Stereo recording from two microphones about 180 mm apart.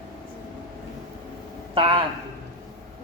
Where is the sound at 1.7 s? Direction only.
30° right (ahead or behind).